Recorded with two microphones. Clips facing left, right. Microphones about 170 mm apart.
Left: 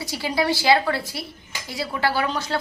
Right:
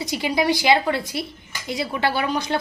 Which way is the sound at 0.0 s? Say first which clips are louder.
Right 2 dB; 20° right (ahead or behind).